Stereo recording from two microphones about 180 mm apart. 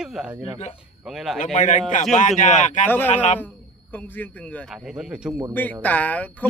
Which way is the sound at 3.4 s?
10° left (ahead or behind).